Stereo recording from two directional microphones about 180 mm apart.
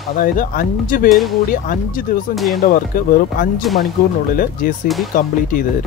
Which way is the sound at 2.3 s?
Centre (ahead or behind).